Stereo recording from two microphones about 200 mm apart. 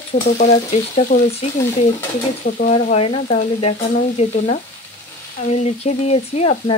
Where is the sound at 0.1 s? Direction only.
35° left (ahead or behind).